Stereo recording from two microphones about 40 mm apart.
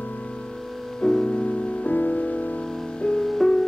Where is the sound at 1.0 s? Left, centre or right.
Centre.